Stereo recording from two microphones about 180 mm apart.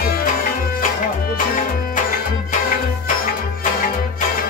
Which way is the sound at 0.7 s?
50° left (ahead or behind).